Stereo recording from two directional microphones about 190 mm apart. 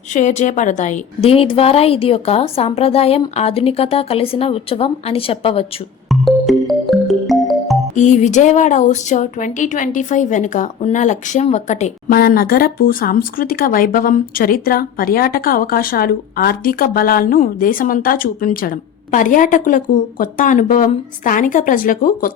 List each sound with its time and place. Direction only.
0.1 s a woman's voice: 40° left (ahead or behind)
6.1 s music: centre (ahead or behind)
7.9 s speech: 40° left (ahead or behind)